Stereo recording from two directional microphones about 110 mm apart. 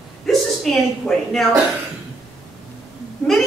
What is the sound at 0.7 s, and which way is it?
Speech, centre (ahead or behind).